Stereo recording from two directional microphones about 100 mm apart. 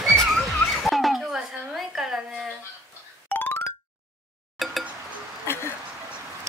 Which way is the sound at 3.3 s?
20° left (ahead or behind).